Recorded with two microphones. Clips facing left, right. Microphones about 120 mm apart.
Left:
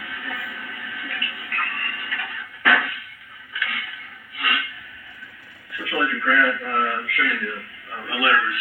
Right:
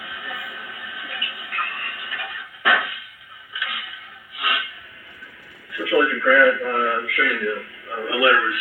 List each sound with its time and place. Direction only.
0.0 s music: 15° right (ahead or behind)
3.5 s a sound: 10° right (ahead or behind)
5.7 s a man's voice: 30° right (ahead or behind)